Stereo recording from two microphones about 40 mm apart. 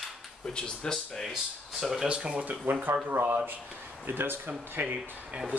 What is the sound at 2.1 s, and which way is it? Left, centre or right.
Speech, right.